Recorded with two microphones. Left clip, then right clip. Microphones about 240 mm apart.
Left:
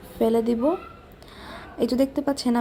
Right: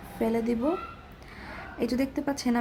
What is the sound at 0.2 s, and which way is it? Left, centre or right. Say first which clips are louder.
A woman's voice: left 6 dB; centre.